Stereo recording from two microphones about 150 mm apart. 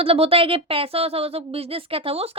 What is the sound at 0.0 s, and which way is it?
A woman's voice, 40° right (ahead or behind).